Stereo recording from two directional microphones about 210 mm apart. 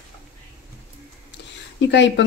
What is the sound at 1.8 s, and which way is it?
Speech, 55° left (ahead or behind).